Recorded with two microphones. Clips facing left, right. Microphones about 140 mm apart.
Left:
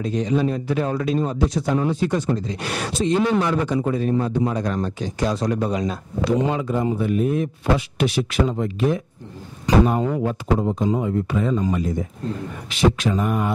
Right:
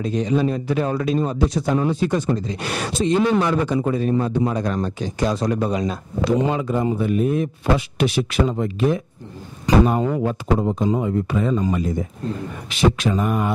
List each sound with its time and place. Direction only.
0.0 s speech: 15° right (ahead or behind)
10.1 s speech: 25° right (ahead or behind)